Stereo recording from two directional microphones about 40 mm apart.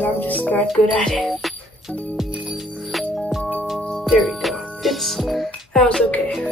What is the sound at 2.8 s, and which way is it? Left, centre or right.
Music, centre.